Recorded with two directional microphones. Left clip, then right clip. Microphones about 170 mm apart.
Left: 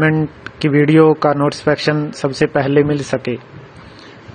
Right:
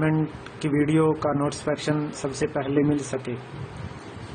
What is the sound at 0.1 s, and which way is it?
Speech, 40° left (ahead or behind).